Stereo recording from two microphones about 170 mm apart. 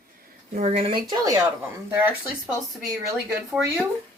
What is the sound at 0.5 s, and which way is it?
Speech, 40° right (ahead or behind).